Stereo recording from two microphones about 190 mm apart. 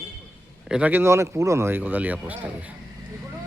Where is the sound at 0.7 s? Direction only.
10° right (ahead or behind).